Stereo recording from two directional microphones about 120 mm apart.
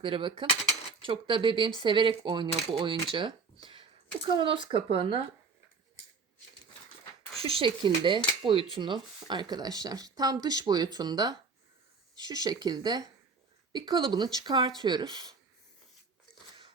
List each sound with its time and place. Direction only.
0.0 s speech: 45° right (ahead or behind)
7.4 s speech: 45° right (ahead or behind)